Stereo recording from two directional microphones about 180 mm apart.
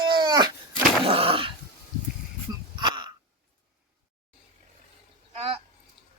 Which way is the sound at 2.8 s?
25° right (ahead or behind).